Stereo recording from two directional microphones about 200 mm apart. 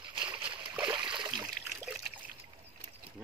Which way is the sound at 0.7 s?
5° right (ahead or behind).